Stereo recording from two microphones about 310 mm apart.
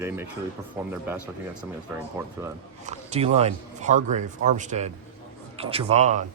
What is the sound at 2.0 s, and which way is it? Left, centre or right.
Speech, centre.